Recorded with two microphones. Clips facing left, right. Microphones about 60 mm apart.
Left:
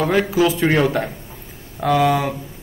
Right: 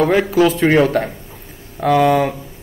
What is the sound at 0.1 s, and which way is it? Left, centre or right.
A man's voice, centre.